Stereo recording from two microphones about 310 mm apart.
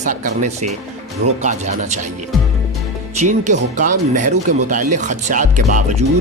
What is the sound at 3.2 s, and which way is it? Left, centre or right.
Speech, right.